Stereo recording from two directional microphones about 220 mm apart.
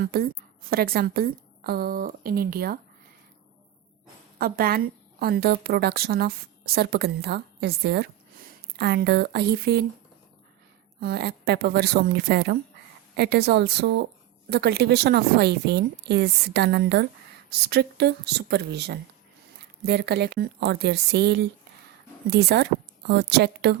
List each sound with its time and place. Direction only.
0.0 s a woman's voice: 45° right (ahead or behind)
4.4 s a woman's voice: 40° right (ahead or behind)
11.0 s a woman's voice: 45° right (ahead or behind)